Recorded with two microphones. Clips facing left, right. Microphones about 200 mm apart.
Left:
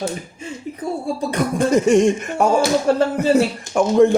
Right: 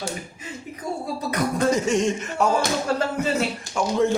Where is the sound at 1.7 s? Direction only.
55° left (ahead or behind).